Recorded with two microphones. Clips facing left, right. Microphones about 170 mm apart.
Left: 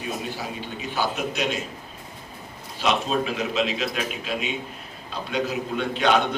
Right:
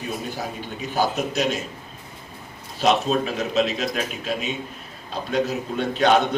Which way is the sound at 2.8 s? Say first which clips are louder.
Right 3 dB; 40° right (ahead or behind).